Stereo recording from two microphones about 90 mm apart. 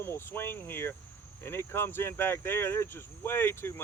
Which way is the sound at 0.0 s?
25° left (ahead or behind).